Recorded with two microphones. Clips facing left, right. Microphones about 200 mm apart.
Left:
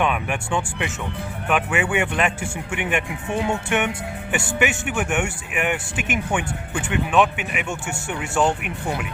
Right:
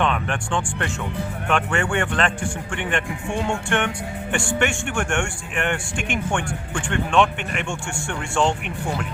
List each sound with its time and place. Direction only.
0.0 s speech: 10° left (ahead or behind)